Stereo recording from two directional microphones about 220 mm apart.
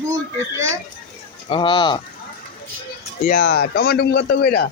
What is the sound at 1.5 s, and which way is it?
Speech, 20° left (ahead or behind).